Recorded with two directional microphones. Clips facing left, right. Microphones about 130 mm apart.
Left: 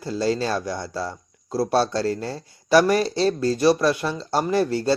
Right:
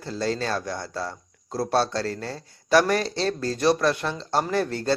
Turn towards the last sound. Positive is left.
turn(degrees=5)  # may be behind; listen again after turning